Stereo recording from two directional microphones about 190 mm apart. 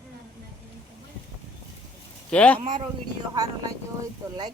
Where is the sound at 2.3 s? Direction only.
5° left (ahead or behind).